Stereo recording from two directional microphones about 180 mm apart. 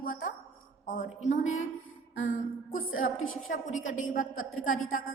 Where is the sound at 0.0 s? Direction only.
50° left (ahead or behind).